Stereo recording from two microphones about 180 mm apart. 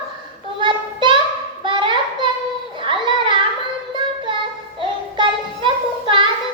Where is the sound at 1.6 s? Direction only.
25° right (ahead or behind).